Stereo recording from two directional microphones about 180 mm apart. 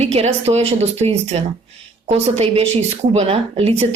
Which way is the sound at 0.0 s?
35° right (ahead or behind).